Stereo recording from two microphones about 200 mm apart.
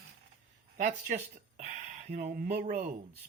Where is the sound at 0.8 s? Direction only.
40° right (ahead or behind).